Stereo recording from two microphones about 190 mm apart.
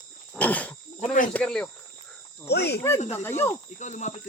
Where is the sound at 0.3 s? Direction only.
10° left (ahead or behind).